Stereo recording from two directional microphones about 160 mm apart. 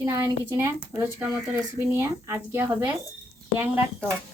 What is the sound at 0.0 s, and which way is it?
Speech, 20° right (ahead or behind).